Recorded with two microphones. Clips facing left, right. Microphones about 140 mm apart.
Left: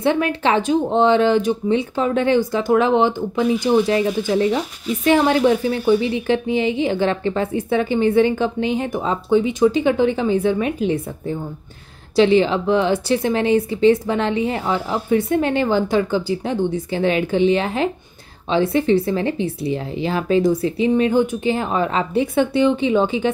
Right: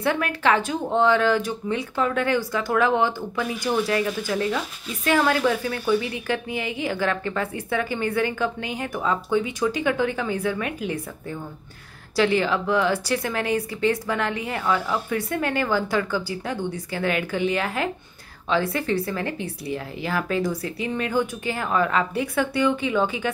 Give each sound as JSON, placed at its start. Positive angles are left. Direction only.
{"t": 0.0, "sound": "speech", "side_deg": 25}